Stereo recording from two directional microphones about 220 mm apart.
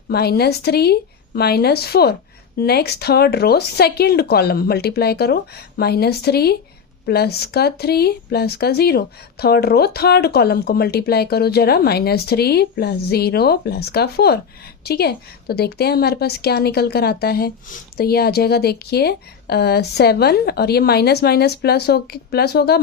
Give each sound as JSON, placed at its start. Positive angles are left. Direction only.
{"t": 0.1, "sound": "a woman's voice", "side_deg": 45}